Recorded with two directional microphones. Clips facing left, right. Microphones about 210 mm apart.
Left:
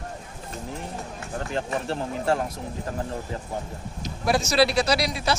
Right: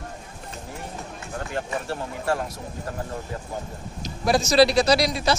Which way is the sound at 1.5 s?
25° left (ahead or behind).